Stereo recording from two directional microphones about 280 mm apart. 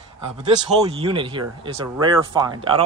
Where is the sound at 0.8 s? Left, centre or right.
Centre.